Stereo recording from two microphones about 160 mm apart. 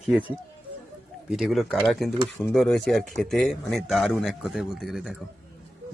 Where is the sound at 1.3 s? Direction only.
Centre (ahead or behind).